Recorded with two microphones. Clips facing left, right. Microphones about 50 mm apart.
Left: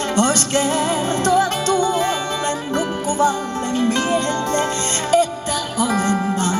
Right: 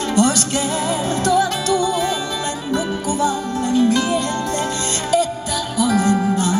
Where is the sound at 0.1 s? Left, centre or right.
Left.